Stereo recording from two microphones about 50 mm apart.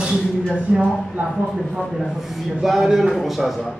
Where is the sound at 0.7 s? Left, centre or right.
Centre.